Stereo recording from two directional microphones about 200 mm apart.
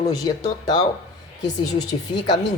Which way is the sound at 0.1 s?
20° left (ahead or behind).